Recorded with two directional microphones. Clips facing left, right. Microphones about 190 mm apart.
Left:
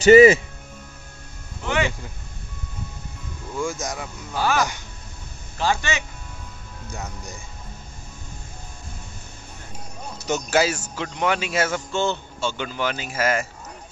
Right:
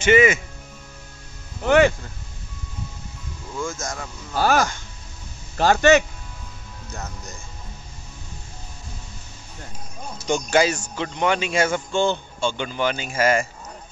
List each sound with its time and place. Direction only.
0.0 s speech: 35° left (ahead or behind)
1.6 s a sound: 55° right (ahead or behind)
3.5 s speech: 15° left (ahead or behind)
4.4 s speech: 40° right (ahead or behind)
5.6 s a man's voice: 50° right (ahead or behind)
10.5 s a man's voice: 5° left (ahead or behind)